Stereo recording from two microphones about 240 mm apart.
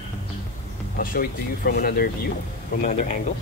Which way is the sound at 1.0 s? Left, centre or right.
Left.